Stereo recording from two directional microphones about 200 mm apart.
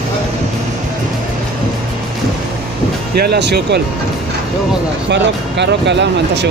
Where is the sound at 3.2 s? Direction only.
55° right (ahead or behind).